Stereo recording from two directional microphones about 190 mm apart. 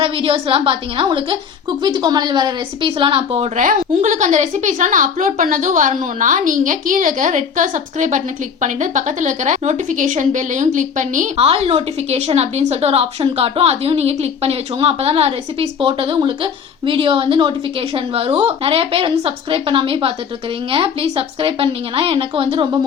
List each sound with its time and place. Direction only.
0.0 s a woman's voice: 30° right (ahead or behind)
3.6 s a woman's voice: 40° right (ahead or behind); by 22.8 s 25° right (ahead or behind)